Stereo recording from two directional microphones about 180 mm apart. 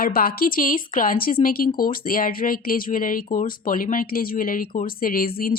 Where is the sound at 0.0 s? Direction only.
55° left (ahead or behind).